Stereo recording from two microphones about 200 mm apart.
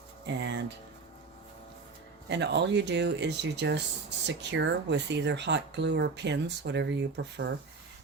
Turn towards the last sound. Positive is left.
turn(degrees=-60)  # may be behind; listen again after turning